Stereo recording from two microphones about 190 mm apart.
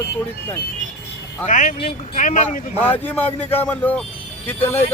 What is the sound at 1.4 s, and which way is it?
A man's voice, 45° left (ahead or behind).